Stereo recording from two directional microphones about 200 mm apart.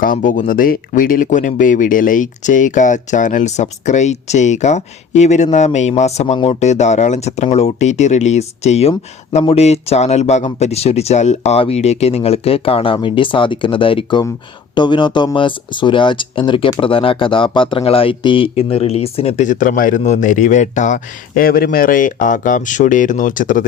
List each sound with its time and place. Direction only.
0.0 s speech: 40° left (ahead or behind)